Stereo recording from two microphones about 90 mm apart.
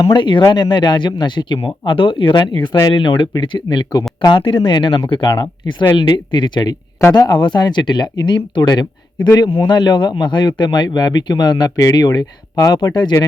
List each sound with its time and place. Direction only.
0.1 s speech: 65° left (ahead or behind)
4.3 s speech: 70° left (ahead or behind)
5.3 s speech: 55° left (ahead or behind)